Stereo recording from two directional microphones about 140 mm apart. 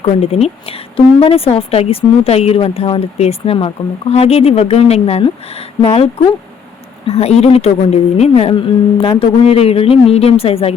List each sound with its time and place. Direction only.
0.2 s speech: 50° left (ahead or behind)
7.1 s speech: 50° left (ahead or behind)